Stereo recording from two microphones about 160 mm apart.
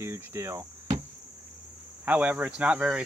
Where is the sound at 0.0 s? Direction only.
15° right (ahead or behind).